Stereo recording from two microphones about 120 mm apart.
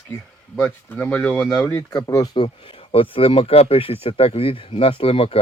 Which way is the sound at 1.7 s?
25° left (ahead or behind).